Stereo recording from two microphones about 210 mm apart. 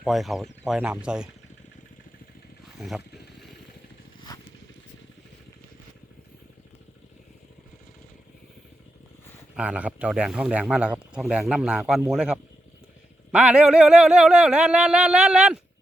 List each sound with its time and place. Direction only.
0.0 s speech: centre (ahead or behind)
2.7 s speech: centre (ahead or behind)
4.3 s vehicle: 20° left (ahead or behind)
9.6 s speech: 5° right (ahead or behind)